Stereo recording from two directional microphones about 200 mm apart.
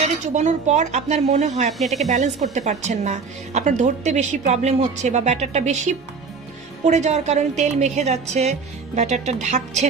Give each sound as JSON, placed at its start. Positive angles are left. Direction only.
{"t": 0.0, "sound": "speech", "side_deg": -35}